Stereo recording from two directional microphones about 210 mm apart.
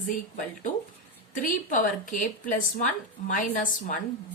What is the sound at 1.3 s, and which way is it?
A woman's voice, 40° left (ahead or behind).